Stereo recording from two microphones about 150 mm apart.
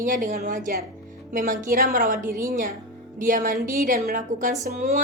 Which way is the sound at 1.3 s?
60° right (ahead or behind).